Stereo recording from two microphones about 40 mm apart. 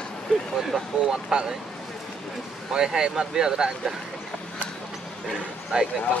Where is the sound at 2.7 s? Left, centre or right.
Centre.